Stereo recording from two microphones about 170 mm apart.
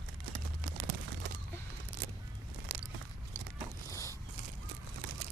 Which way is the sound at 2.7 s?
65° right (ahead or behind).